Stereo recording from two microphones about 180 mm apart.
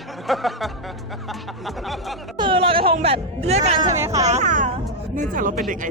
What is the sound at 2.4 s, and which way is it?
Speech, 30° right (ahead or behind).